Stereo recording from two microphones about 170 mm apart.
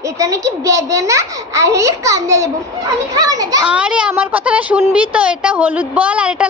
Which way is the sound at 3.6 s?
5° right (ahead or behind).